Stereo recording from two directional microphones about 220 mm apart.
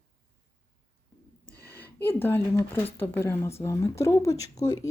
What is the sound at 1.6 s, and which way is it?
Speech, 10° left (ahead or behind).